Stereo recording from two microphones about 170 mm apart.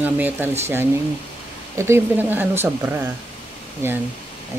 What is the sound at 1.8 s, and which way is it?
Speech, 15° right (ahead or behind).